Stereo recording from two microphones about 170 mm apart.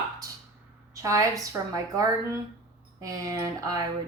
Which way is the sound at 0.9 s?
20° right (ahead or behind).